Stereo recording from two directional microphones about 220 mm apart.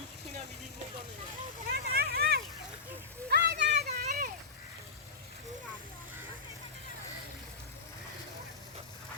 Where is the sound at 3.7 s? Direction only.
30° right (ahead or behind).